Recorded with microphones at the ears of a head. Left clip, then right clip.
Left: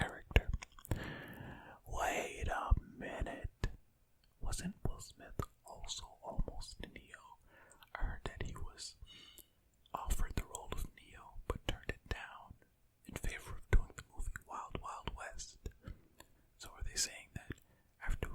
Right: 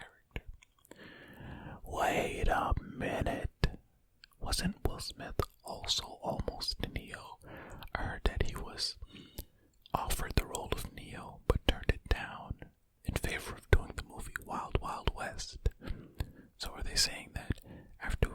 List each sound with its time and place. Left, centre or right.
0.0 s whispering: left
1.5 s whispering: right